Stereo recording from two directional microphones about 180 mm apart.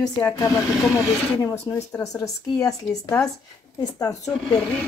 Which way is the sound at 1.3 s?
15° left (ahead or behind).